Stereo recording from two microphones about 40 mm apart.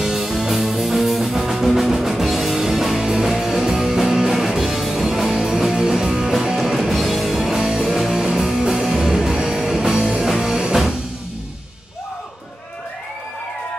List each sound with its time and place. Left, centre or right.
0.0 s music: centre
7.6 s music: centre
7.9 s music: centre
8.2 s music: centre